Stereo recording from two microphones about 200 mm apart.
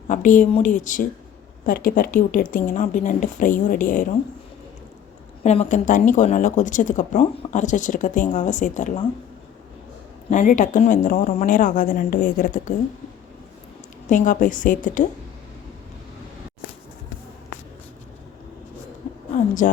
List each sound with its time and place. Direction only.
0.1 s a woman's voice: 40° left (ahead or behind)
5.4 s speech: 35° left (ahead or behind)
10.2 s speech: 40° left (ahead or behind)
14.1 s speech: 40° left (ahead or behind)
19.6 s a woman's voice: 40° left (ahead or behind)